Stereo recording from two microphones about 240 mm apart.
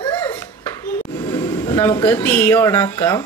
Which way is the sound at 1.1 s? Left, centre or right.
Centre.